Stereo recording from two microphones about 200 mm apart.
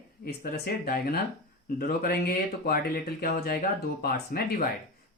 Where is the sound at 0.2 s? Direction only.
50° left (ahead or behind).